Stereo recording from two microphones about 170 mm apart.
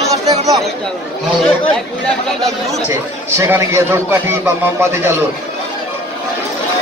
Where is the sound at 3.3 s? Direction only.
15° right (ahead or behind).